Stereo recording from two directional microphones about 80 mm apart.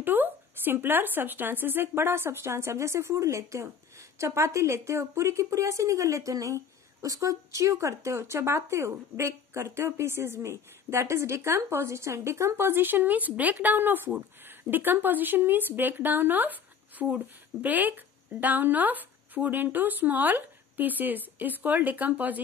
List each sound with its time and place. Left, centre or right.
0.0 s a woman's voice: right